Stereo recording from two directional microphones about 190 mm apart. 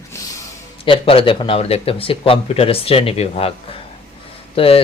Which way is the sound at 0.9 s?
30° left (ahead or behind).